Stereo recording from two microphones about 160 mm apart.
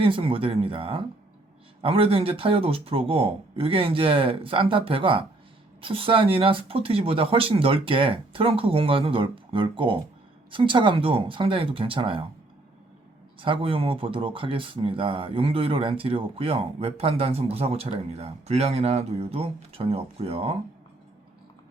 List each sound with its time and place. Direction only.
0.0 s speech: 35° right (ahead or behind)
13.4 s speech: 35° right (ahead or behind)